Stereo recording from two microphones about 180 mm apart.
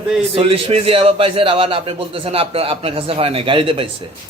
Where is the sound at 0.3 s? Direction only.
30° right (ahead or behind).